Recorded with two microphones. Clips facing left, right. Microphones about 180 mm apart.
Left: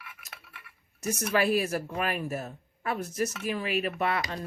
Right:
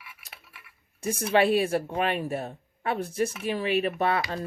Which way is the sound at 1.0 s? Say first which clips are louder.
Right 4 dB; 30° right (ahead or behind).